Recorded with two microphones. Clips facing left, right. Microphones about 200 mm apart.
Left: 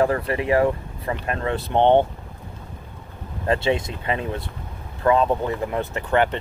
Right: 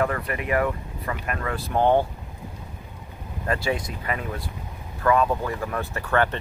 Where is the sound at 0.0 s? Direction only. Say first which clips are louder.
Left 5 dB; 30° left (ahead or behind).